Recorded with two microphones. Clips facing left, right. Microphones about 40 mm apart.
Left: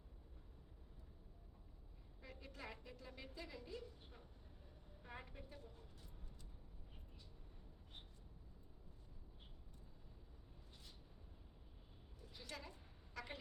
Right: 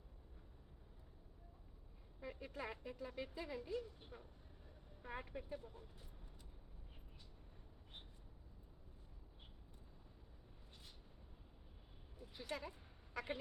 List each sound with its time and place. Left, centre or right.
2.2 s a woman's voice: centre
12.2 s a woman's voice: centre
13.1 s a sound: centre